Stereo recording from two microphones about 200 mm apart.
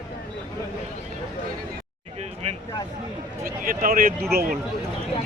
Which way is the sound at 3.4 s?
45° right (ahead or behind).